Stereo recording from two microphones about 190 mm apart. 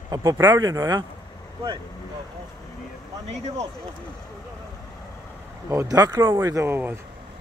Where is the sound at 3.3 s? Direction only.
35° right (ahead or behind).